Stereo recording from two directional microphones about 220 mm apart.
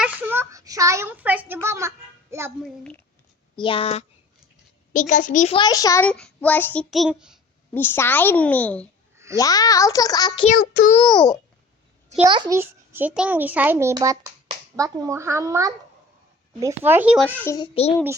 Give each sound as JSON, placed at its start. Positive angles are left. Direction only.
{"t": 0.0, "sound": "a child's voice", "side_deg": -10}
{"t": 2.6, "sound": "a woman's voice", "side_deg": 5}
{"t": 3.5, "sound": "speech", "side_deg": 20}
{"t": 4.9, "sound": "a child's voice", "side_deg": 35}
{"t": 5.5, "sound": "a child's voice", "side_deg": 15}
{"t": 7.7, "sound": "a child's voice", "side_deg": 10}
{"t": 9.1, "sound": "a sound", "side_deg": -15}
{"t": 9.4, "sound": "a child's voice", "side_deg": 15}
{"t": 10.5, "sound": "a child's voice", "side_deg": 40}
{"t": 10.9, "sound": "speech", "side_deg": 20}
{"t": 12.3, "sound": "a child's voice", "side_deg": -15}
{"t": 17.2, "sound": "a child's voice", "side_deg": 10}